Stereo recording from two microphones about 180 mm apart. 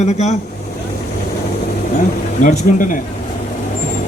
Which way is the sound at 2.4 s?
45° left (ahead or behind).